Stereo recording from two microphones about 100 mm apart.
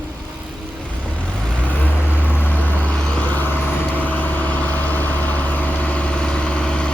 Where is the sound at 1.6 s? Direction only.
15° left (ahead or behind).